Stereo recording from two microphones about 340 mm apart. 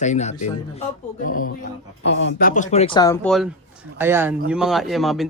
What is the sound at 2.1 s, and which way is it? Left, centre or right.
Speech, left.